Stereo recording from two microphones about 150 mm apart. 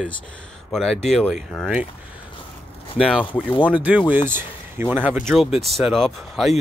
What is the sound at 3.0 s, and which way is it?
Speech, centre (ahead or behind).